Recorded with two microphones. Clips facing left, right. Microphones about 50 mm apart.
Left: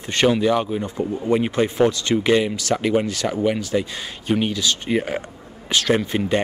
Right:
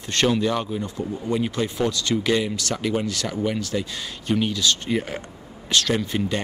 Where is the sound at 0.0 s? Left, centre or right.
Centre.